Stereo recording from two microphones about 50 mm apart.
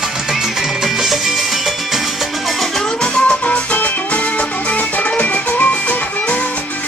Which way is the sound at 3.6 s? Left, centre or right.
Left.